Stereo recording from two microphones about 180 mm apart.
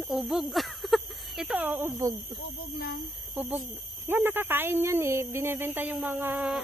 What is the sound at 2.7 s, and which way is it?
Speech, 60° left (ahead or behind).